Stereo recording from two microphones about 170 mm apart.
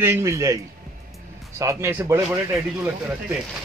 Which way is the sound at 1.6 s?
15° right (ahead or behind).